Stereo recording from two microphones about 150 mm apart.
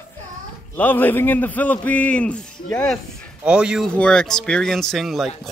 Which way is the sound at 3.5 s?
5° right (ahead or behind).